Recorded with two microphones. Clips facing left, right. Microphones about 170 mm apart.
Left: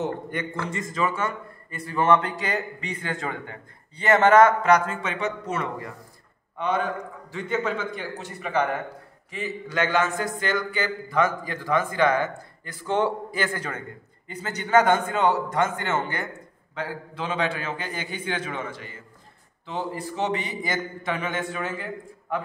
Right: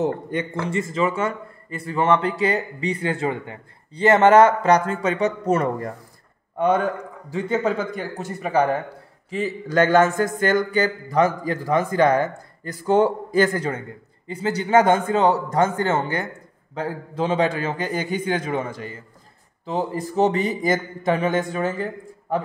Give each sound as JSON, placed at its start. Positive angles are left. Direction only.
{"t": 0.0, "sound": "a man's voice", "side_deg": -25}